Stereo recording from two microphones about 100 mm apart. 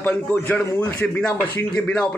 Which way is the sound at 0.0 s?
20° left (ahead or behind).